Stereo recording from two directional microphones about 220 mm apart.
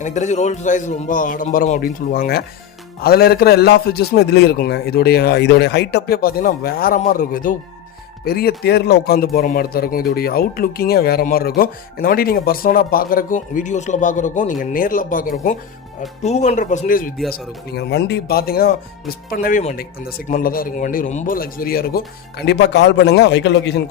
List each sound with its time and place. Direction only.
0.0 s a man's voice: 30° left (ahead or behind)
17.7 s speech: 50° left (ahead or behind)